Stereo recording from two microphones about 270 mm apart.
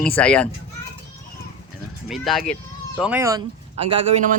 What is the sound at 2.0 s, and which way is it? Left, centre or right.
Speech, centre.